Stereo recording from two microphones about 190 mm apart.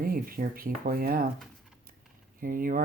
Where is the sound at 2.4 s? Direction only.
50° right (ahead or behind).